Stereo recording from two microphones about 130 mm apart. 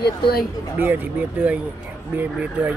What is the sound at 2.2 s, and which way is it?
Speech, 15° right (ahead or behind).